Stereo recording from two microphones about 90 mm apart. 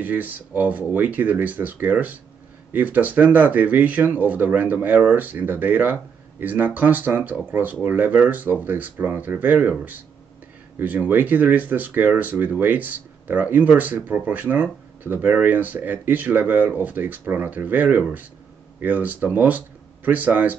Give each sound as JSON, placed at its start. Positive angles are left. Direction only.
{"t": 0.0, "sound": "speech", "side_deg": -20}